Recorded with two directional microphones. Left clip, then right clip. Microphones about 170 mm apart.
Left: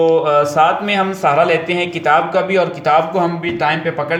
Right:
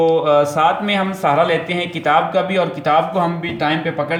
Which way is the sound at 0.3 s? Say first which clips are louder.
Left 1 dB; 25° left (ahead or behind).